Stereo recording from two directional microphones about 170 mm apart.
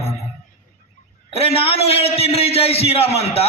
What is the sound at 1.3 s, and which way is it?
A man's voice, 35° left (ahead or behind).